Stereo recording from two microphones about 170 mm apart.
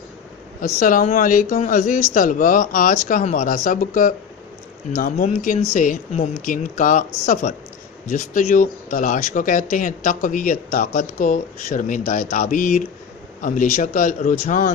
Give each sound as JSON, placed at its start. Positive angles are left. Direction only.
{"t": 0.6, "sound": "speech", "side_deg": 55}
{"t": 5.1, "sound": "speech", "side_deg": 40}